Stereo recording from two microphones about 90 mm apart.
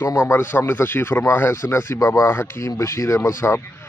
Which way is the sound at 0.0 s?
35° left (ahead or behind).